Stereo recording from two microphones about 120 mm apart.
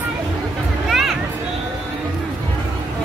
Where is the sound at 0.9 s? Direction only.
Centre (ahead or behind).